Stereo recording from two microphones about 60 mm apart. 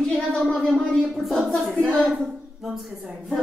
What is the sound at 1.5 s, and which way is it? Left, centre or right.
Speech, centre.